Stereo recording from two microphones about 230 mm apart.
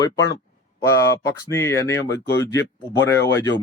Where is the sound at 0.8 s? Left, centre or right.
Centre.